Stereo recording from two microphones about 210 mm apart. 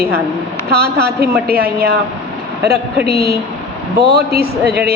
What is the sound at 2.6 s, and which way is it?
A woman's voice, 50° right (ahead or behind).